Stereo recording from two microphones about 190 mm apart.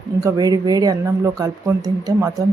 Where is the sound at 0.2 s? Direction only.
20° right (ahead or behind).